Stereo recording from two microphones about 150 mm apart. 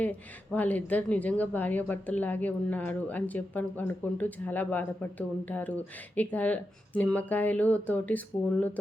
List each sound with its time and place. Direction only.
0.0 s a woman's voice: 10° left (ahead or behind)